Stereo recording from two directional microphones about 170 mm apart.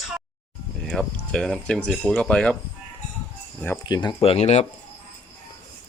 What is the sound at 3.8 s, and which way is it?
Speech, 25° left (ahead or behind).